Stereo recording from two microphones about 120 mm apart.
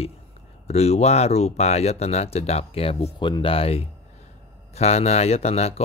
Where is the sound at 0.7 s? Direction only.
60° left (ahead or behind).